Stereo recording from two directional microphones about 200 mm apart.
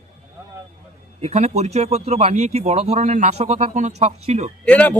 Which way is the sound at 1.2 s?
35° right (ahead or behind).